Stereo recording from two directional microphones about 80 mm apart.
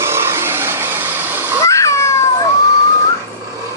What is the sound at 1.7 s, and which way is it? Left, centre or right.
Cat, left.